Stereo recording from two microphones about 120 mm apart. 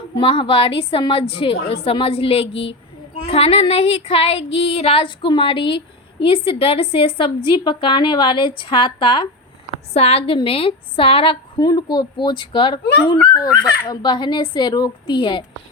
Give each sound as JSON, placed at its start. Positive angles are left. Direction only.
{"t": 0.2, "sound": "a woman's voice", "side_deg": 45}
{"t": 9.9, "sound": "a woman's voice", "side_deg": 55}
{"t": 11.6, "sound": "speech", "side_deg": 35}